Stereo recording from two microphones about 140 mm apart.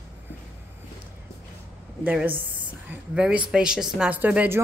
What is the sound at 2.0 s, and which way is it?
A woman's voice, 10° right (ahead or behind).